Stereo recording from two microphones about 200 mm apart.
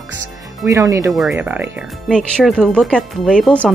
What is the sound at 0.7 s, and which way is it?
Speech, 15° right (ahead or behind).